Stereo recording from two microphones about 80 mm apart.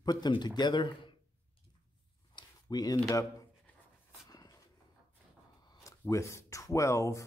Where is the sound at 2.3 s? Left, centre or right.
Left.